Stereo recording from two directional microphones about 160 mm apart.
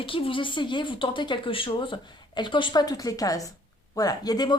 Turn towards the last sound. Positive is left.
turn(degrees=25)  # may be behind; listen again after turning